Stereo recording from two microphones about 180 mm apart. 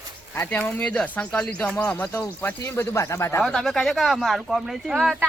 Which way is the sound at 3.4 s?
Centre (ahead or behind).